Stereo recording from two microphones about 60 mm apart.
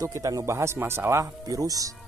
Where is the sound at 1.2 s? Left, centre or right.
Right.